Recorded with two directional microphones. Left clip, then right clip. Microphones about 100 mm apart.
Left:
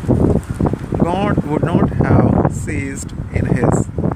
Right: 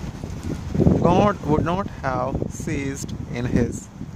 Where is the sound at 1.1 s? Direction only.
60° right (ahead or behind).